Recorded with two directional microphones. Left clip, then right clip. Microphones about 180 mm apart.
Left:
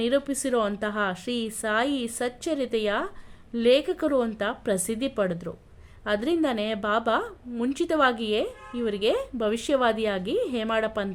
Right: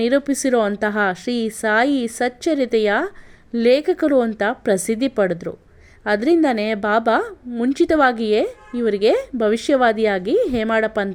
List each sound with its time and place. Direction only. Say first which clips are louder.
0.0 s a woman's voice: right 7 dB; 35° right (ahead or behind)